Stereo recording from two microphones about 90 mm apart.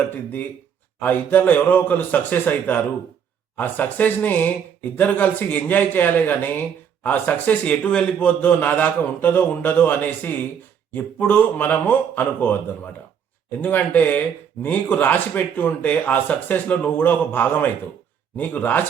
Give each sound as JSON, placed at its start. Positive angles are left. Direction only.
{"t": 0.1, "sound": "a man's voice", "side_deg": 20}